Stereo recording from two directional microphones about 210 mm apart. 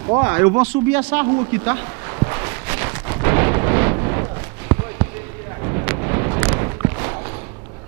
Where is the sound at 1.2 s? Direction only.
15° right (ahead or behind).